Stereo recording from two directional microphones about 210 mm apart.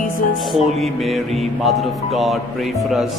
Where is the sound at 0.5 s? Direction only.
Centre (ahead or behind).